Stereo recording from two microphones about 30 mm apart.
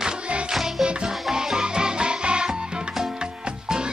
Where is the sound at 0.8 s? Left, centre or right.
Right.